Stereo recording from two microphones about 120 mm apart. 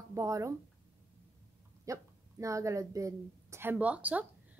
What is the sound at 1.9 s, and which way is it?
Speech, 30° right (ahead or behind).